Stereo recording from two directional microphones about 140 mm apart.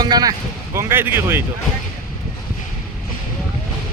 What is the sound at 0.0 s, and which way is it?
Speech, 30° right (ahead or behind).